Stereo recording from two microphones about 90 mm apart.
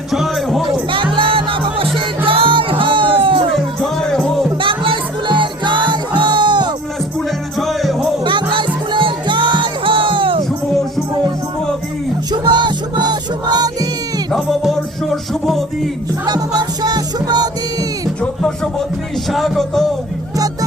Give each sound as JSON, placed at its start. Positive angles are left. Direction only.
{"t": 0.1, "sound": "music", "side_deg": 0}
{"t": 1.1, "sound": "music", "side_deg": -70}
{"t": 3.5, "sound": "music", "side_deg": 5}
{"t": 4.6, "sound": "music", "side_deg": -75}
{"t": 7.6, "sound": "music", "side_deg": 0}
{"t": 8.2, "sound": "music", "side_deg": -60}
{"t": 12.3, "sound": "music", "side_deg": -55}
{"t": 14.3, "sound": "music", "side_deg": 0}
{"t": 16.2, "sound": "music", "side_deg": -50}
{"t": 18.2, "sound": "a sound", "side_deg": 5}
{"t": 19.3, "sound": "music", "side_deg": 0}